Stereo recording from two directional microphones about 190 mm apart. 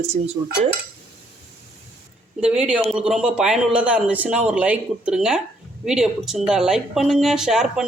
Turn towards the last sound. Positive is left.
turn(degrees=0)  # may be behind; listen again after turning